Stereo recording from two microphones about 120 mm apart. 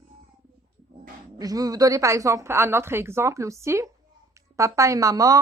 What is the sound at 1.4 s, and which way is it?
A woman's voice, 30° right (ahead or behind).